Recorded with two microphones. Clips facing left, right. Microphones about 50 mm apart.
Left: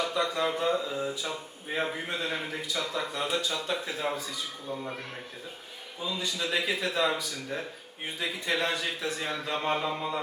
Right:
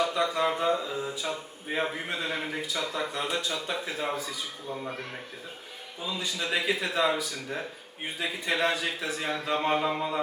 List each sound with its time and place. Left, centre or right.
0.0 s a man's voice: centre
6.0 s speech: centre
9.8 s a sound: right